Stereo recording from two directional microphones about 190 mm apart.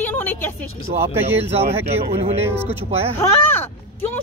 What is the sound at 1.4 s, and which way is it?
Speech, 30° right (ahead or behind).